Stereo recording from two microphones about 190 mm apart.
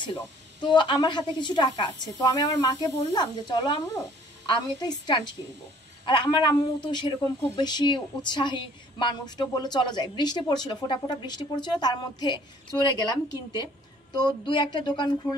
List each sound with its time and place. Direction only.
0.0 s speech: 25° left (ahead or behind)